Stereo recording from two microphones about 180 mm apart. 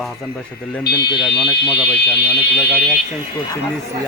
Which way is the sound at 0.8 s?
65° left (ahead or behind).